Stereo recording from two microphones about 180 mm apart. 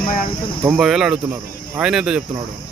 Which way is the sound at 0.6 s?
5° right (ahead or behind).